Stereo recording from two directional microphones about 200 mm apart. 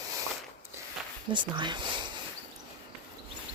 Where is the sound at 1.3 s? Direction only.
25° right (ahead or behind).